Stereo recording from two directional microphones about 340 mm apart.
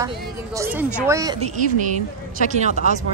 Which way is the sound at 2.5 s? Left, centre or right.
Right.